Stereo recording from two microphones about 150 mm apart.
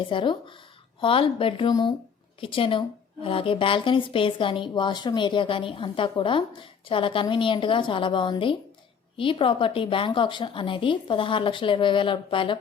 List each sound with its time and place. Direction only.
0.0 s a woman's voice: 35° left (ahead or behind)